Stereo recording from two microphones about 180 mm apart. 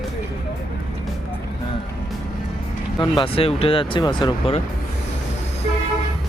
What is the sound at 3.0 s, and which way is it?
Speech, 25° left (ahead or behind).